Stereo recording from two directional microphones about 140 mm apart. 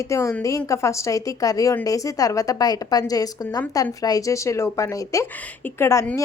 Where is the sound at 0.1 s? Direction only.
20° left (ahead or behind).